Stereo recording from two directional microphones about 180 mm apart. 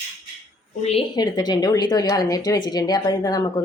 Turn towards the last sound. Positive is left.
turn(degrees=20)  # may be behind; listen again after turning